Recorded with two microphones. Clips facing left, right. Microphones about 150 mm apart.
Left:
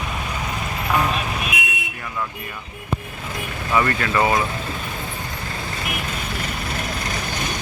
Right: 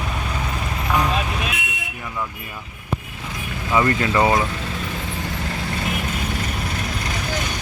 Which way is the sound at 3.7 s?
20° right (ahead or behind).